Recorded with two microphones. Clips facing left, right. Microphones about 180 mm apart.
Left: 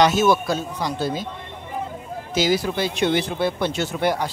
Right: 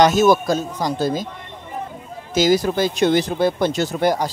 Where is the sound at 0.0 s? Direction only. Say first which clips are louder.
Right 3 dB; 45° right (ahead or behind).